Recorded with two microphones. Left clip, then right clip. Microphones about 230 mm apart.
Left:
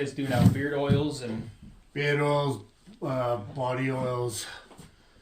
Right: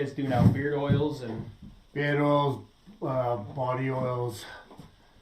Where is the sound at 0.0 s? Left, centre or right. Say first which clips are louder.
Even; centre.